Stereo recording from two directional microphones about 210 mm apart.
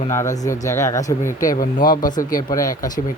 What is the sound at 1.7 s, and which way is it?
Speech, 40° left (ahead or behind).